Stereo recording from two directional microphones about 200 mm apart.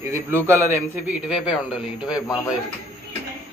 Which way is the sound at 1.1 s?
5° right (ahead or behind).